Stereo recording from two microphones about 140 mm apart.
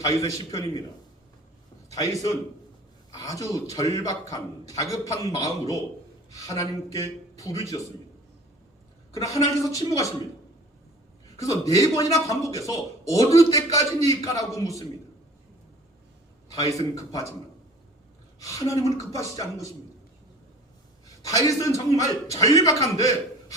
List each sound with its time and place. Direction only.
0.0 s a man's voice: 25° left (ahead or behind)
1.9 s a man's voice: 25° left (ahead or behind)
9.1 s a man's voice: 25° left (ahead or behind)
11.3 s a man's voice: 25° left (ahead or behind)
16.5 s a man's voice: 25° left (ahead or behind)
18.3 s a woman's voice: 25° left (ahead or behind)
21.2 s a man's voice: 25° left (ahead or behind)